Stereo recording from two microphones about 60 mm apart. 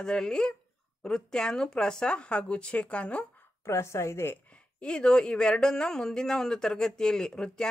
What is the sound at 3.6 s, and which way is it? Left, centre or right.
Speech, left.